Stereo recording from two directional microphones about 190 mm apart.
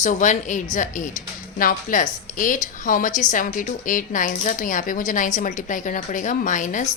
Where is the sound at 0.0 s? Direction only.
40° left (ahead or behind).